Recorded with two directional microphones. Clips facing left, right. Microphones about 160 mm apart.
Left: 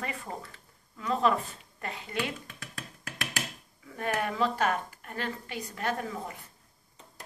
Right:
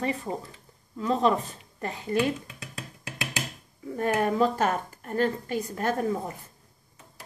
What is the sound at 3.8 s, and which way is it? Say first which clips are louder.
A woman's voice: right 6 dB; 40° right (ahead or behind).